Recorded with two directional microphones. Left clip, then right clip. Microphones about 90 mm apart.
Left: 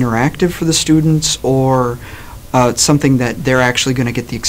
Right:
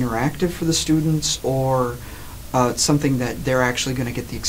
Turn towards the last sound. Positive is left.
turn(degrees=25)  # may be behind; listen again after turning